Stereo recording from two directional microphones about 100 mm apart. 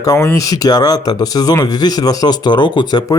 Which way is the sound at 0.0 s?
30° left (ahead or behind).